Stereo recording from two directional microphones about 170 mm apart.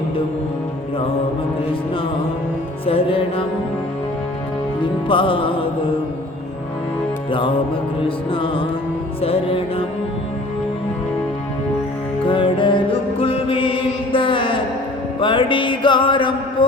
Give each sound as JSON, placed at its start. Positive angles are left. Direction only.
{"t": 2.8, "sound": "music", "side_deg": 35}
{"t": 4.8, "sound": "music", "side_deg": 30}
{"t": 7.3, "sound": "music", "side_deg": 30}
{"t": 12.3, "sound": "music", "side_deg": 30}